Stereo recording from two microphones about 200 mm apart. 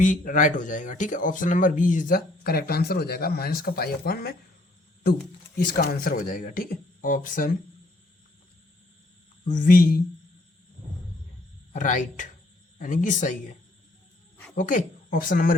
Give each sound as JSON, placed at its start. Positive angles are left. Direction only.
{"t": 0.0, "sound": "speech", "side_deg": 40}
{"t": 5.5, "sound": "speech", "side_deg": 50}
{"t": 9.4, "sound": "speech", "side_deg": 40}
{"t": 11.7, "sound": "speech", "side_deg": 40}
{"t": 14.5, "sound": "speech", "side_deg": 40}